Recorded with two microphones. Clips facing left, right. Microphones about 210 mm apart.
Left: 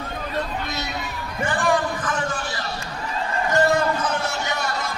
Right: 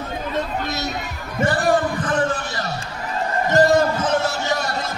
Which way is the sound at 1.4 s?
40° right (ahead or behind).